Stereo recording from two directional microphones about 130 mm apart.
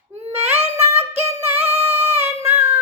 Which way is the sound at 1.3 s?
20° right (ahead or behind).